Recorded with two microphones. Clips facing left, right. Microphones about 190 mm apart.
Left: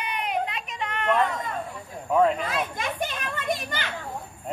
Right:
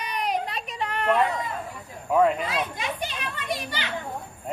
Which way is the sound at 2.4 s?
50° left (ahead or behind).